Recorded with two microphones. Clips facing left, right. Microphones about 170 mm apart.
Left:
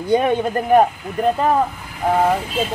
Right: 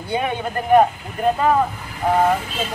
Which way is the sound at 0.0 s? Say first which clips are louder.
Left 6 dB; 40° left (ahead or behind).